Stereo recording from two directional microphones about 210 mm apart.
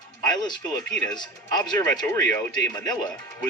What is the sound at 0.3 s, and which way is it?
Speech, 20° left (ahead or behind).